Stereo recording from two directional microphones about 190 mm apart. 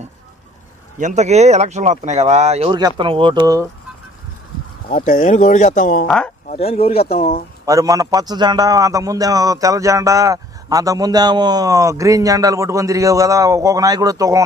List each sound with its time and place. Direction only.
0.9 s speech: 40° right (ahead or behind); by 3.6 s 20° right (ahead or behind)
4.8 s speech: 45° left (ahead or behind)
6.0 s speech: 5° left (ahead or behind)
6.5 s speech: 30° left (ahead or behind)
7.6 s a man's voice: 15° right (ahead or behind)